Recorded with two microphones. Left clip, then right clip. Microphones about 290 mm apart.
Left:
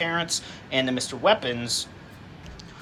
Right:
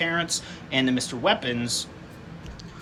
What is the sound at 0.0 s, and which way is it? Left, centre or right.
Speech, centre.